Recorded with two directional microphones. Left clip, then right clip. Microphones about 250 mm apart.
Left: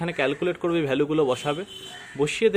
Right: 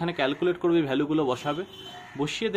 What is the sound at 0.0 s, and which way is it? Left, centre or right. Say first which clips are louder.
Speech: left 1 dB; left.